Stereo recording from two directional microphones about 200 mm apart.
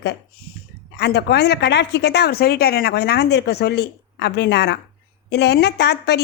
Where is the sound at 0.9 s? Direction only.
55° left (ahead or behind).